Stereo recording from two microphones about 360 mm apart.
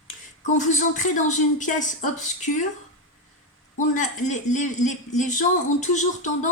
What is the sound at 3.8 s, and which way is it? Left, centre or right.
Speech, left.